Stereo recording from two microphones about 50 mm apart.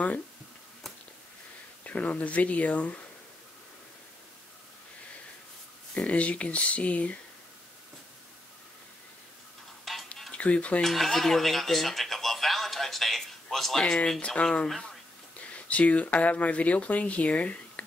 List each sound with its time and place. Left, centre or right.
1.9 s speech: left
5.9 s speech: left
9.9 s music: centre
10.3 s speech: left
10.8 s a sound: centre
13.8 s speech: centre
15.7 s speech: left